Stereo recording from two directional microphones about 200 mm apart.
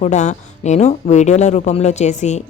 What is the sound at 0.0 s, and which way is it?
Speech, 35° left (ahead or behind).